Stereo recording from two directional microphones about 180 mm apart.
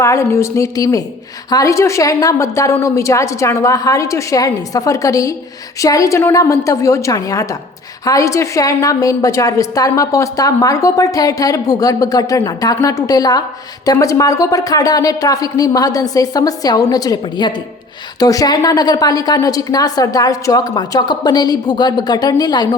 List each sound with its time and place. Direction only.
0.0 s a woman's voice: 15° left (ahead or behind)